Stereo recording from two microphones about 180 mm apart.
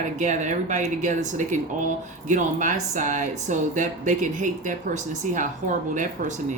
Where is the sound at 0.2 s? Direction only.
40° right (ahead or behind).